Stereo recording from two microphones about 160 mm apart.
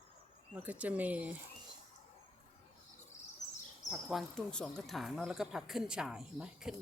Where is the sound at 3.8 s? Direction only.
5° right (ahead or behind).